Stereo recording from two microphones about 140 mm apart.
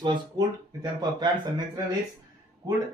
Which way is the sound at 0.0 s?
30° right (ahead or behind).